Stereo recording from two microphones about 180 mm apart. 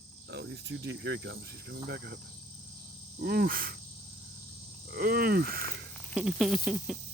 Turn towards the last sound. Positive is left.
turn(degrees=-5)  # may be behind; listen again after turning